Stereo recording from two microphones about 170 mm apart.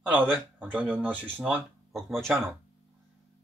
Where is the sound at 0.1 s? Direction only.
10° right (ahead or behind).